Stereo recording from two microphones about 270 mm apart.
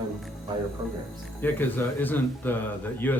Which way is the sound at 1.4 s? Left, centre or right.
Centre.